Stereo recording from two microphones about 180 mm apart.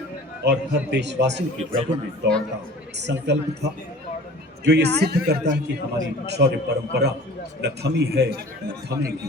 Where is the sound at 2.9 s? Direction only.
75° right (ahead or behind).